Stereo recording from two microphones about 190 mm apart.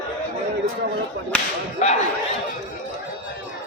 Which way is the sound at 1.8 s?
35° left (ahead or behind).